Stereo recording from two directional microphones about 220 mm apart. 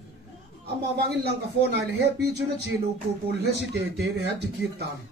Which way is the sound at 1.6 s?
50° right (ahead or behind).